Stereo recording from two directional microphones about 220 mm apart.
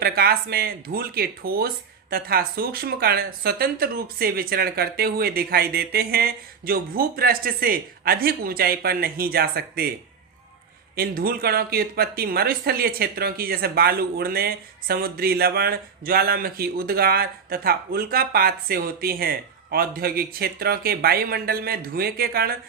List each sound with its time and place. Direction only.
0.0 s speech: 45° right (ahead or behind)
10.9 s speech: 40° right (ahead or behind)